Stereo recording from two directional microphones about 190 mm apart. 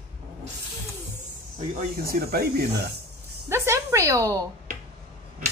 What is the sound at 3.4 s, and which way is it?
Speech, 15° right (ahead or behind).